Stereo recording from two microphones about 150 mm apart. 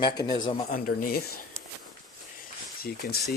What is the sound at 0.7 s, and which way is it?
Speech, 75° left (ahead or behind).